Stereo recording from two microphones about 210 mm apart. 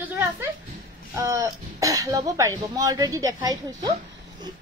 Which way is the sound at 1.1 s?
15° right (ahead or behind).